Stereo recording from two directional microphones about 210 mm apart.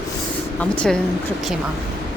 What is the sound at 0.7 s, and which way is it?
Speech, 5° left (ahead or behind).